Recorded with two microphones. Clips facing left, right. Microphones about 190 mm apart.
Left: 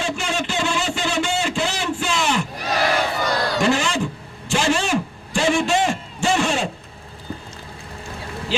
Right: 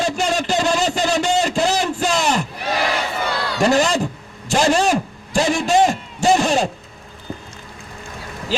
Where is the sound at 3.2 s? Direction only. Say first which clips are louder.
Left 2 dB; 45° left (ahead or behind).